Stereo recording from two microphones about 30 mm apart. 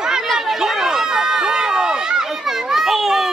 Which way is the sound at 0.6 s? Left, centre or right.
Centre.